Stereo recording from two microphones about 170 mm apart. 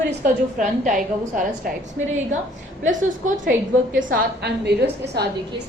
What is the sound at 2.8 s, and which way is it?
Speech, 50° right (ahead or behind).